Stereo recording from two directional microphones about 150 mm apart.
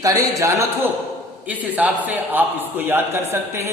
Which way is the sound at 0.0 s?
25° right (ahead or behind).